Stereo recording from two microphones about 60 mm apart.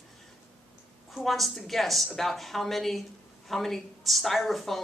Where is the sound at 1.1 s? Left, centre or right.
Centre.